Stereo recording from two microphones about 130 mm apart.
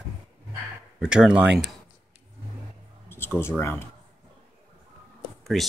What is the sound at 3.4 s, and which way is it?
Speech, 20° left (ahead or behind).